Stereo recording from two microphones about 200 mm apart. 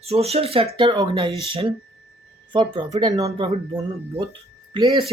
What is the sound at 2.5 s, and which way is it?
Speech, 25° right (ahead or behind).